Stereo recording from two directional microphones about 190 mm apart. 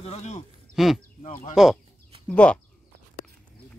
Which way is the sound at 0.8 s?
Centre (ahead or behind).